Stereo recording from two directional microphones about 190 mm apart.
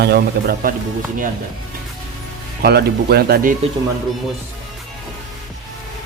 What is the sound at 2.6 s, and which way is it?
Speech, 55° right (ahead or behind).